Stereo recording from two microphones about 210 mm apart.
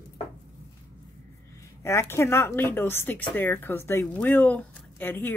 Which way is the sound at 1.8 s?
15° left (ahead or behind).